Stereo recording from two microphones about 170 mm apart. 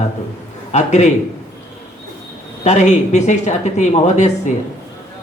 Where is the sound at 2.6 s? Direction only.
40° left (ahead or behind).